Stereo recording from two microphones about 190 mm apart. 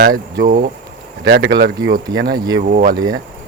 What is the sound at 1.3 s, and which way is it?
Speech, 65° right (ahead or behind).